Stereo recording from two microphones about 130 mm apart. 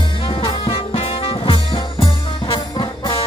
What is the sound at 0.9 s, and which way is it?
Music, 50° left (ahead or behind).